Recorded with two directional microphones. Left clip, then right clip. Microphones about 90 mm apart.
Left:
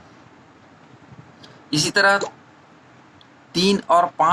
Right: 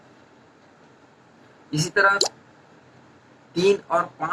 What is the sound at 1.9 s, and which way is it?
Speech, 30° left (ahead or behind).